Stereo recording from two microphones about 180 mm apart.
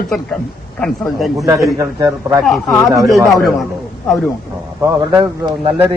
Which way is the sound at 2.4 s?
10° left (ahead or behind).